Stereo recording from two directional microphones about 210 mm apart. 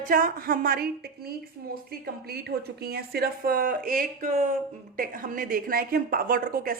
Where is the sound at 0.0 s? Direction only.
40° right (ahead or behind).